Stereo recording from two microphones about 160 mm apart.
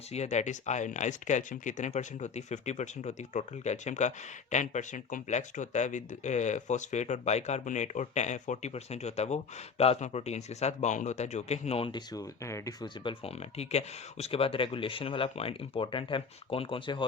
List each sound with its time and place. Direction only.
0.1 s speech: 45° left (ahead or behind); by 12.9 s 20° left (ahead or behind)
13.1 s speech: 40° left (ahead or behind)